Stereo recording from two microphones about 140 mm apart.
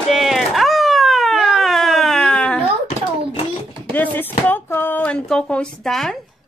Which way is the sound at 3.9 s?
15° left (ahead or behind).